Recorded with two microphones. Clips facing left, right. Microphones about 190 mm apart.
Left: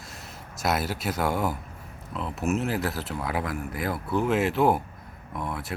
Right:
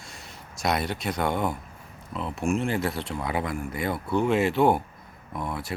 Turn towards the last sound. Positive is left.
turn(degrees=0)  # may be behind; listen again after turning